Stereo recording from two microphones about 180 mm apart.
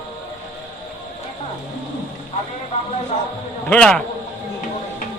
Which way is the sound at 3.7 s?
5° left (ahead or behind).